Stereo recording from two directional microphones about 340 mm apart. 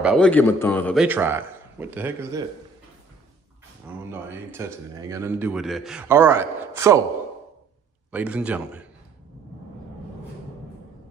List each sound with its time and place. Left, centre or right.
0.0 s a man's voice: centre
4.0 s speech: centre
8.1 s a man's voice: centre